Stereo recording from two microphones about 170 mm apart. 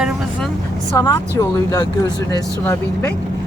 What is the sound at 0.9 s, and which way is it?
Speech, 20° left (ahead or behind).